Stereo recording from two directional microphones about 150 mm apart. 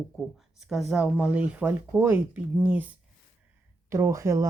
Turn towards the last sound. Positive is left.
turn(degrees=-20)  # may be behind; listen again after turning